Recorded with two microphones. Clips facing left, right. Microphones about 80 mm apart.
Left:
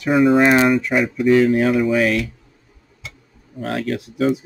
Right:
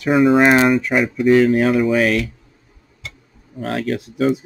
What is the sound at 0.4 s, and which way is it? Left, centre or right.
Speech, right.